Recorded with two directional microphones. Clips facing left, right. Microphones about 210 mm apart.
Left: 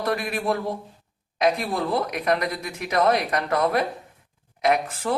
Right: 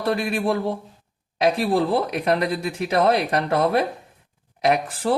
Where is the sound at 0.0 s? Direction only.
30° right (ahead or behind).